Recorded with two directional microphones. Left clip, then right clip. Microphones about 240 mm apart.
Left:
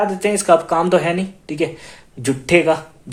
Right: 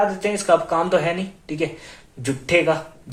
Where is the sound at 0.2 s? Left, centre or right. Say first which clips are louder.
Left 4 dB; left.